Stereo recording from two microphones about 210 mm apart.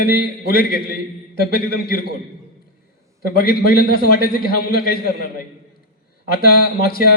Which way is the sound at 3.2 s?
45° left (ahead or behind).